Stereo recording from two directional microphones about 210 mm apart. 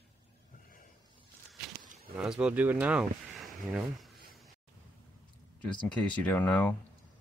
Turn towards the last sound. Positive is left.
turn(degrees=10)  # may be behind; listen again after turning